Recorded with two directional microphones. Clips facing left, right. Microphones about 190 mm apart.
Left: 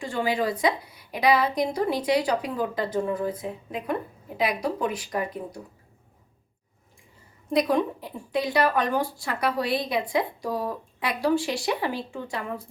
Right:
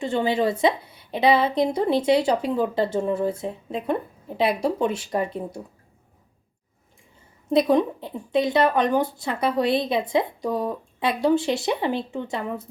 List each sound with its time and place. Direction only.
0.0 s a woman's voice: 25° right (ahead or behind)
7.5 s a woman's voice: 25° right (ahead or behind)